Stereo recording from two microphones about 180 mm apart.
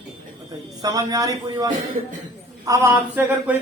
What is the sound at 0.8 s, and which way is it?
A man's voice, 20° right (ahead or behind).